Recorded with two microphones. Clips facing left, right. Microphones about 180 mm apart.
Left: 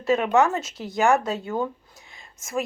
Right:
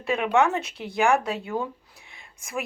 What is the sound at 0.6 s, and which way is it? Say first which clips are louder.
Speech: left 1 dB; 60° right (ahead or behind).